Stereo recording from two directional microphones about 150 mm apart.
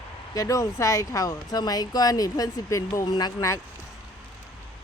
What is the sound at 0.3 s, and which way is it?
Speech, 20° left (ahead or behind).